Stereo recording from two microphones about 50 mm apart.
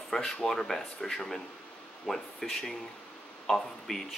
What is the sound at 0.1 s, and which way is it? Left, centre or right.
Speech, centre.